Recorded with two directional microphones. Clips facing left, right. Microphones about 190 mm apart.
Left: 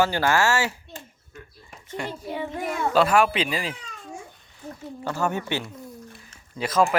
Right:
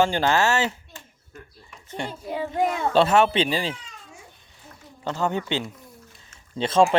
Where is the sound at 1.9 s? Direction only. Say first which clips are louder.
Right 1 dB; 25° right (ahead or behind).